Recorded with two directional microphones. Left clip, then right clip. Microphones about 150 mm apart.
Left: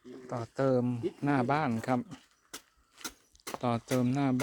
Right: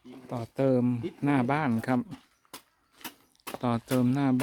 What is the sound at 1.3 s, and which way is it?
Speech, 15° right (ahead or behind).